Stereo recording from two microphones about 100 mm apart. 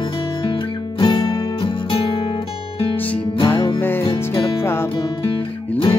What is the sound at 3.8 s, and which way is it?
Music, 20° left (ahead or behind).